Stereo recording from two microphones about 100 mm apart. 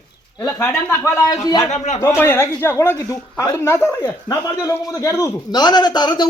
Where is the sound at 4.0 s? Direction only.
40° left (ahead or behind).